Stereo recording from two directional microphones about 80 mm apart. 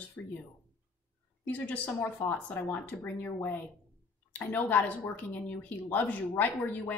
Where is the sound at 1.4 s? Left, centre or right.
Left.